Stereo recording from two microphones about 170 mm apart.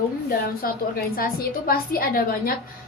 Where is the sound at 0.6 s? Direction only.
60° left (ahead or behind).